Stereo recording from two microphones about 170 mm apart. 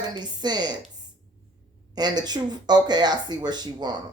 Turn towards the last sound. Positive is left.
turn(degrees=-25)  # may be behind; listen again after turning